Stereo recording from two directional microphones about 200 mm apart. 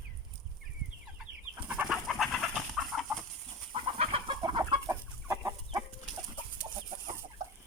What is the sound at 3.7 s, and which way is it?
Chicken, 25° right (ahead or behind).